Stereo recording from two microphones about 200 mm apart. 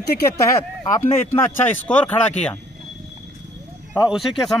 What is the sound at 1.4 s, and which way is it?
Speech, 10° left (ahead or behind).